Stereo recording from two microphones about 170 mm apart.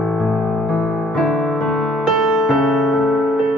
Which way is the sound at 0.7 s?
Centre (ahead or behind).